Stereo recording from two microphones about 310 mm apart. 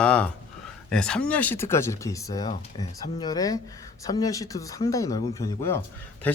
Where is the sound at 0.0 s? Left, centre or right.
Centre.